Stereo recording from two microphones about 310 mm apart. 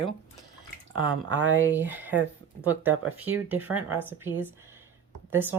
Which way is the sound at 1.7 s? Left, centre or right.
Centre.